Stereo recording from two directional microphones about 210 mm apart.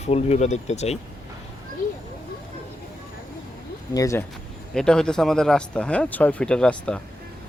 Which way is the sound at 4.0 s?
15° left (ahead or behind).